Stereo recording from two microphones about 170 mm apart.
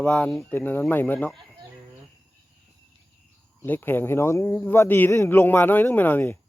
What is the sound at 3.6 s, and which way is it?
A man's voice, 10° left (ahead or behind).